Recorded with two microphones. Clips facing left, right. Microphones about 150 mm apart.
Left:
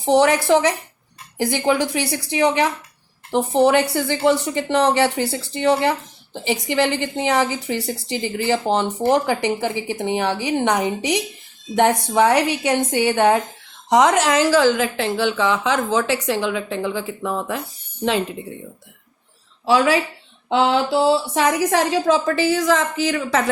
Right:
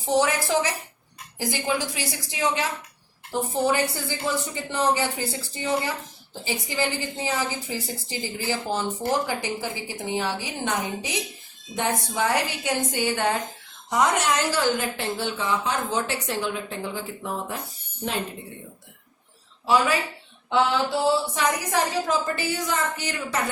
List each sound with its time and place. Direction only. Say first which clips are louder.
0.0 s a woman's voice: left 7 dB; 70° left (ahead or behind)
13.9 s a woman's voice: left 7 dB; 90° left
19.6 s a woman's voice: left 5 dB; 90° left